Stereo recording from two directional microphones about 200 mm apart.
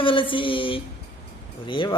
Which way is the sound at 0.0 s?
25° left (ahead or behind).